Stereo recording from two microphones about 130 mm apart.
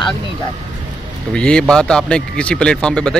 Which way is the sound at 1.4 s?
5° left (ahead or behind).